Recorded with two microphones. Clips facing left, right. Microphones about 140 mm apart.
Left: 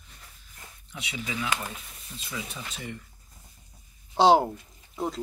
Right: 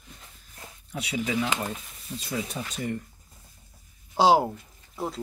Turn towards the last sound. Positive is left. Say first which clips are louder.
# left 1 dB
turn(degrees=0)  # may be behind; listen again after turning